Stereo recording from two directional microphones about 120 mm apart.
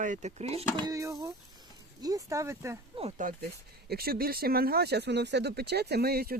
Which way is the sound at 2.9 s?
45° right (ahead or behind).